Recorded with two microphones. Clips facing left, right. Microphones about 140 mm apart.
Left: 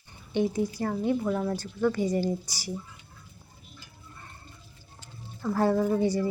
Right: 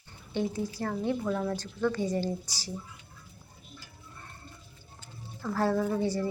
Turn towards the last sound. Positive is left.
turn(degrees=10)  # may be behind; listen again after turning